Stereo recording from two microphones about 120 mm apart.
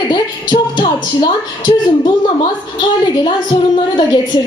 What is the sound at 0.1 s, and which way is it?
Speech, 40° left (ahead or behind).